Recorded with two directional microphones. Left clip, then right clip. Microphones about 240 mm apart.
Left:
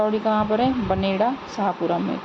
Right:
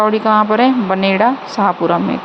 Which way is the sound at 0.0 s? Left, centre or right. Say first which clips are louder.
Right 9 dB; centre.